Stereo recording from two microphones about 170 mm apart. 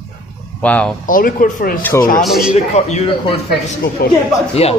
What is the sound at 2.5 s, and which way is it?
Speech, 40° left (ahead or behind).